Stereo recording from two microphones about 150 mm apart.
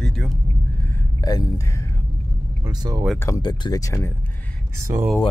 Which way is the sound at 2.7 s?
25° right (ahead or behind).